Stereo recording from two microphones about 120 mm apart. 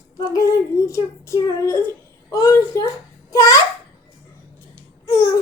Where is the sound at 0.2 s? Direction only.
30° left (ahead or behind).